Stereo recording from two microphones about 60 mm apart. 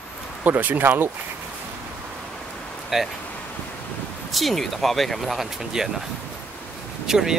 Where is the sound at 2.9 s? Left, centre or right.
Centre.